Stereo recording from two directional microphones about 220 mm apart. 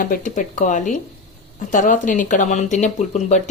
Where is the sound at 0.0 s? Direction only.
35° left (ahead or behind).